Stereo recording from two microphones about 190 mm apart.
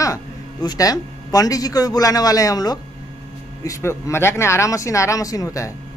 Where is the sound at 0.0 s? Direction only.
20° left (ahead or behind).